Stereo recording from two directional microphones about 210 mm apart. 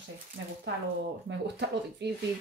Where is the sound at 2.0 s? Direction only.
55° right (ahead or behind).